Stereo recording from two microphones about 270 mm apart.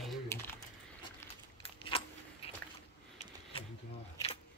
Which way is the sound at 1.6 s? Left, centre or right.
Centre.